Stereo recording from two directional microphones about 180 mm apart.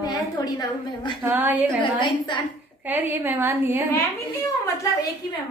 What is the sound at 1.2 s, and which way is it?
Speech, 10° right (ahead or behind).